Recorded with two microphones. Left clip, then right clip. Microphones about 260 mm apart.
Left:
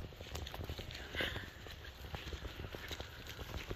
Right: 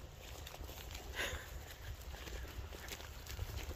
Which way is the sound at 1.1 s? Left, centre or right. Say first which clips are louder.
Left 2 dB; centre.